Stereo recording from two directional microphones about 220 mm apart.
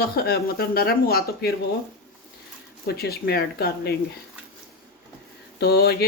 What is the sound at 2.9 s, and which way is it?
Speech, 45° left (ahead or behind).